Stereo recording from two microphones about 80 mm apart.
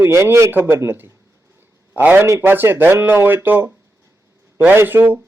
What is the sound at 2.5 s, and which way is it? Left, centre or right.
A man's voice, right.